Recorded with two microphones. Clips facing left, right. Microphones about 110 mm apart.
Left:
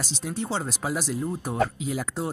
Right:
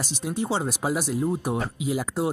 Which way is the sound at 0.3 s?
15° right (ahead or behind).